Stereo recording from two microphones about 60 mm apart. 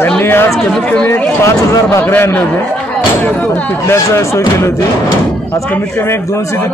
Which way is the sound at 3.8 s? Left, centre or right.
Left.